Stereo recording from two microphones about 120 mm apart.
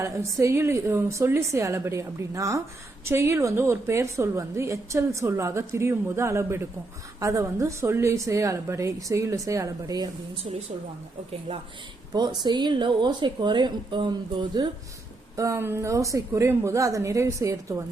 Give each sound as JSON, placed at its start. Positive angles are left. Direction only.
{"t": 0.0, "sound": "a woman's voice", "side_deg": -20}
{"t": 10.5, "sound": "a woman's voice", "side_deg": -60}
{"t": 12.1, "sound": "speech", "side_deg": -35}
{"t": 15.4, "sound": "a woman's voice", "side_deg": -20}